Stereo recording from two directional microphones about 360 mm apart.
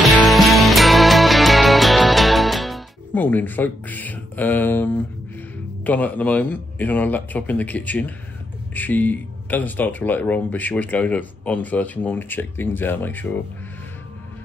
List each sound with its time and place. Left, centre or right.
0.0 s music: centre
5.9 s speech: centre